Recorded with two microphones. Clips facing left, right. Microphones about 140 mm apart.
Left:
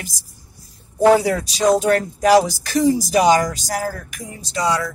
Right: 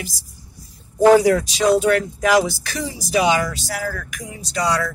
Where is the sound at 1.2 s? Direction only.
40° left (ahead or behind).